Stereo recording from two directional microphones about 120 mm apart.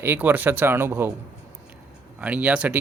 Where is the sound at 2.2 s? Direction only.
10° right (ahead or behind).